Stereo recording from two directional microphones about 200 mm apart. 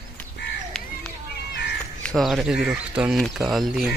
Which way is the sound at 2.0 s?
Centre (ahead or behind).